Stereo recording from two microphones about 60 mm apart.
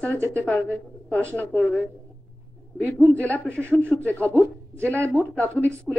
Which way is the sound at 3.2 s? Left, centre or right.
Left.